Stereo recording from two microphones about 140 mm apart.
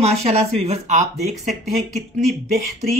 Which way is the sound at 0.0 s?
50° right (ahead or behind).